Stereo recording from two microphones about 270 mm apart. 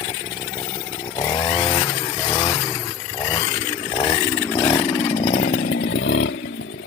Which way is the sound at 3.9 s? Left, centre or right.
Centre.